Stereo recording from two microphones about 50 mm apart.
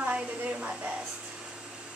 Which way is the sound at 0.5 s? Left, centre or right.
Right.